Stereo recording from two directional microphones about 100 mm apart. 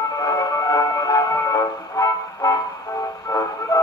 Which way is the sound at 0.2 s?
35° left (ahead or behind).